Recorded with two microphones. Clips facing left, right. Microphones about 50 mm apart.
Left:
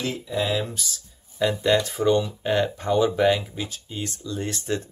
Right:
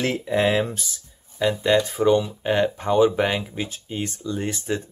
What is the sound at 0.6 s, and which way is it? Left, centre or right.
Speech, right.